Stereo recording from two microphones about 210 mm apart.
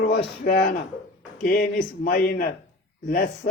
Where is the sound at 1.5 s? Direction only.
40° left (ahead or behind).